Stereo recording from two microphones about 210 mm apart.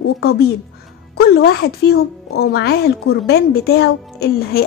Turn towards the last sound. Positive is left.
turn(degrees=45)  # may be behind; listen again after turning